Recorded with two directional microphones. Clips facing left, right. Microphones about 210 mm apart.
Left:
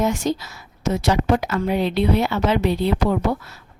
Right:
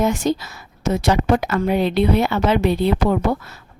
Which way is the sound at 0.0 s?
55° right (ahead or behind).